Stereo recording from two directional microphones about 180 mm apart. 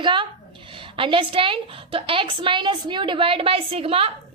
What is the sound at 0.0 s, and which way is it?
A woman's voice, 25° right (ahead or behind).